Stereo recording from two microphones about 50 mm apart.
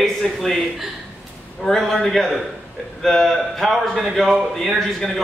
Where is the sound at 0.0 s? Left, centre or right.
Centre.